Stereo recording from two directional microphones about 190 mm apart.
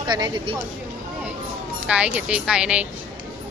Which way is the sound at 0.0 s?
20° right (ahead or behind).